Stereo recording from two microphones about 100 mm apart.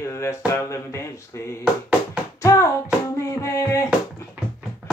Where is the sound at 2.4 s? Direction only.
30° left (ahead or behind).